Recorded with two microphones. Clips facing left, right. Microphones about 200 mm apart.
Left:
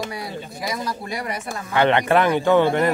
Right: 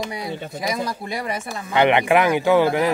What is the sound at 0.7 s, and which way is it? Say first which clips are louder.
Speech: right 2 dB; 25° right (ahead or behind).